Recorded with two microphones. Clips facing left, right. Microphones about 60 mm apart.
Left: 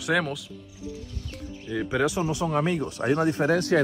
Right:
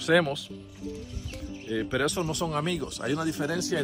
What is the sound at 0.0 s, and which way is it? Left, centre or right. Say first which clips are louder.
Speech: right 2 dB; centre.